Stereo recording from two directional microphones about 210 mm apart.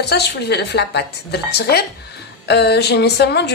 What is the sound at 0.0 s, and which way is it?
A woman's voice, 50° left (ahead or behind).